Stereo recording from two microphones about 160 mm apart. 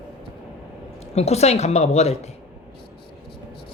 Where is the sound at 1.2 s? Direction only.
40° left (ahead or behind).